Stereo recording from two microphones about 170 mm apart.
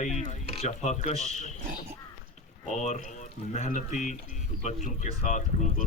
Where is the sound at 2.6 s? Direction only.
45° left (ahead or behind).